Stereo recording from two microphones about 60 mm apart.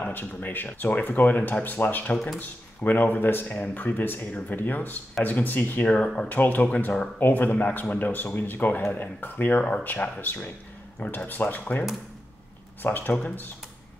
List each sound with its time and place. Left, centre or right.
0.1 s speech: left
5.9 s speech: centre
6.2 s speech: left
7.2 s speech: left
12.8 s speech: left